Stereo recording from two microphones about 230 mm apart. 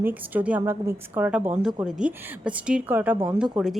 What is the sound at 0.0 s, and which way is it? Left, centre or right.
A woman's voice, centre.